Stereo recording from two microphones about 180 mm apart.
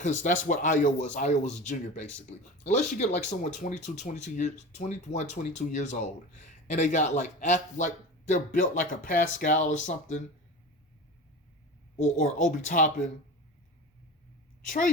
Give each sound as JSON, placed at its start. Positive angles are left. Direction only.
{"t": 0.0, "sound": "speech", "side_deg": 45}
{"t": 12.2, "sound": "speech", "side_deg": 45}